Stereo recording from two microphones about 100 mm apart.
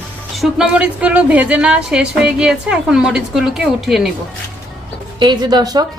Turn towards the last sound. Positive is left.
turn(degrees=-45)  # may be behind; listen again after turning